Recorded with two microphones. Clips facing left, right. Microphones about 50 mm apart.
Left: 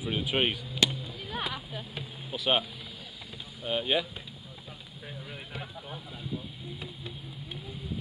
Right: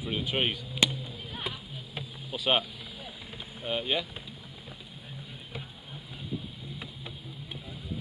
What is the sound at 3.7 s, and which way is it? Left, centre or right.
Speech, centre.